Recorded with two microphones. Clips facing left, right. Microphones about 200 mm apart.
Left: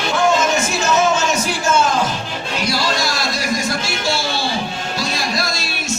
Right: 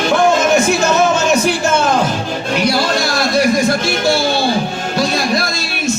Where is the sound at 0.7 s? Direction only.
60° right (ahead or behind).